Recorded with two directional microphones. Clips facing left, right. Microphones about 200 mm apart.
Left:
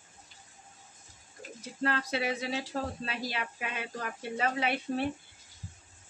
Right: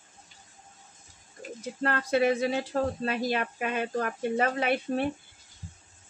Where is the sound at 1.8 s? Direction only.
50° right (ahead or behind).